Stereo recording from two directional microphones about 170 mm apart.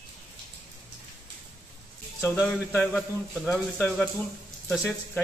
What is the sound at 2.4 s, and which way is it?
Speech, 5° left (ahead or behind).